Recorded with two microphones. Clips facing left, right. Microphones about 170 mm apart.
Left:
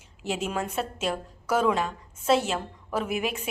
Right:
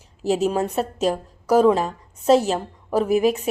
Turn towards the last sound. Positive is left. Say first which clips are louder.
# right 10 dB
turn(degrees=-40)  # may be behind; listen again after turning